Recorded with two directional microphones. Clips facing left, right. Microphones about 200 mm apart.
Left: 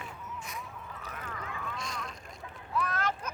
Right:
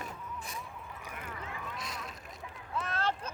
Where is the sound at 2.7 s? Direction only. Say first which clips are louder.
Left 2 dB; 25° right (ahead or behind).